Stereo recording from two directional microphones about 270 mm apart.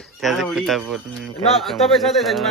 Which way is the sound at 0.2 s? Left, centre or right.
Centre.